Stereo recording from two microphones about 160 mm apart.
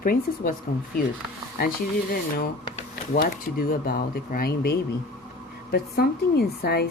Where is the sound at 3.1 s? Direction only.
65° left (ahead or behind).